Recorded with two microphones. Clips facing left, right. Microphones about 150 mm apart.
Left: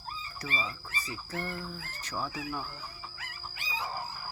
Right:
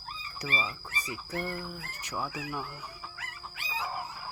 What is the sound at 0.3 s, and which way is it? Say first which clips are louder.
Speech: right 3 dB; 15° right (ahead or behind).